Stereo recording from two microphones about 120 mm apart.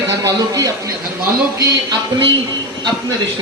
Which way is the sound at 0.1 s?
30° right (ahead or behind).